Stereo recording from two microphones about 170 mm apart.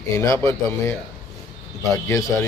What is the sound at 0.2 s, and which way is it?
A man's voice, 15° left (ahead or behind).